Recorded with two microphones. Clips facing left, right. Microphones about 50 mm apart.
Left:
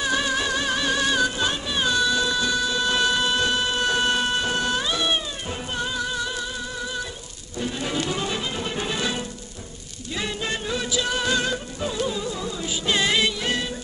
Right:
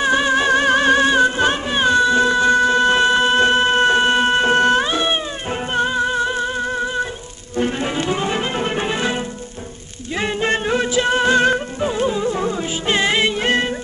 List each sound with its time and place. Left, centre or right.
0.0 s music: right
7.5 s music: right
7.9 s music: right